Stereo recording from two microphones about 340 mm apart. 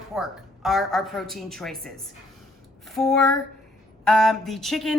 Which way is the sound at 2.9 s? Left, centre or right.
Centre.